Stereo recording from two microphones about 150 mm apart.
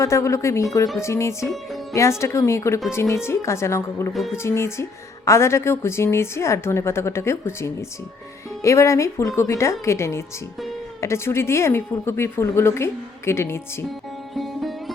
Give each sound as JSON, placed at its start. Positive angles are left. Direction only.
{"t": 0.0, "sound": "a woman's voice", "side_deg": 20}
{"t": 4.1, "sound": "speech", "side_deg": 0}
{"t": 4.4, "sound": "a woman's voice", "side_deg": 20}
{"t": 14.3, "sound": "sitar", "side_deg": 0}